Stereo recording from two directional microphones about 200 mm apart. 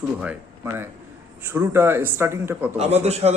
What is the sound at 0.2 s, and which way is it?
Speech, 10° right (ahead or behind).